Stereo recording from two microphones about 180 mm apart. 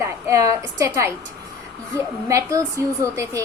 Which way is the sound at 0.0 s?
15° right (ahead or behind).